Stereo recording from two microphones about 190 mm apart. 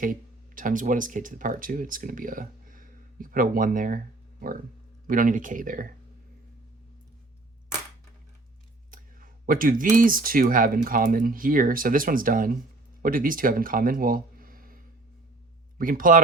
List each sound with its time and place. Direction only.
0.0 s speech: 45° right (ahead or behind)
8.9 s speech: 45° right (ahead or behind)
15.8 s speech: 45° right (ahead or behind)